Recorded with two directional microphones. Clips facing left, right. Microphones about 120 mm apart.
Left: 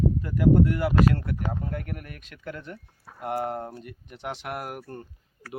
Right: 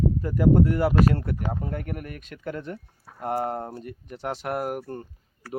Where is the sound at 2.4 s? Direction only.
40° right (ahead or behind).